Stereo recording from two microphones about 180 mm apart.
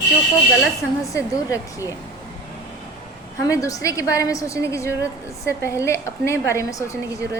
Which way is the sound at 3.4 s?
15° left (ahead or behind).